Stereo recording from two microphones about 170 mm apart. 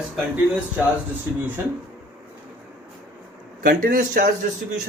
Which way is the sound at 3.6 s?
60° right (ahead or behind).